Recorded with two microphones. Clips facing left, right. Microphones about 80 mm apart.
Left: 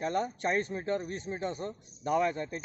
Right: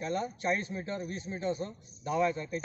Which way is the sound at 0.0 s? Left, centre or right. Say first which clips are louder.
Left 2 dB; left.